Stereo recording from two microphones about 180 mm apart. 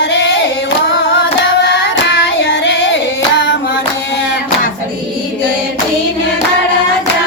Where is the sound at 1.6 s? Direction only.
85° left.